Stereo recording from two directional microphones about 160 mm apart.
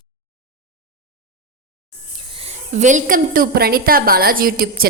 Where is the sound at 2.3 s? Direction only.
40° right (ahead or behind).